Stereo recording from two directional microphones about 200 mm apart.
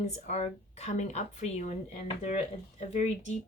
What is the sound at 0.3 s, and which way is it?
Speech, 35° left (ahead or behind).